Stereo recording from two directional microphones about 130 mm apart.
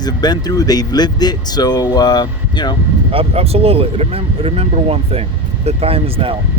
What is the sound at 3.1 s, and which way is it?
Speech, 45° right (ahead or behind).